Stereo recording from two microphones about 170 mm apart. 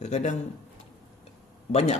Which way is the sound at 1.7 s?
40° left (ahead or behind).